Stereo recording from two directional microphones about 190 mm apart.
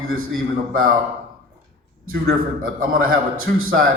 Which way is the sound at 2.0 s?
90° right.